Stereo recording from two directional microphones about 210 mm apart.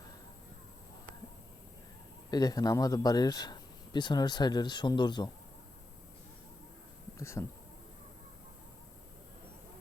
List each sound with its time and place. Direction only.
2.3 s speech: 20° left (ahead or behind)
7.2 s speech: 15° left (ahead or behind)